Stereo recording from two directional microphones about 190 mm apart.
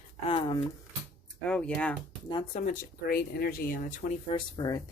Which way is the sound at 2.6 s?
45° left (ahead or behind).